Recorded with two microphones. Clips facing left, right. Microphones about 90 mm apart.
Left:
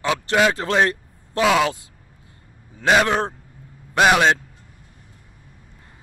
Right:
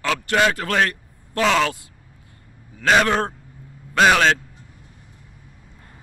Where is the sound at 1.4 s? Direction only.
10° left (ahead or behind).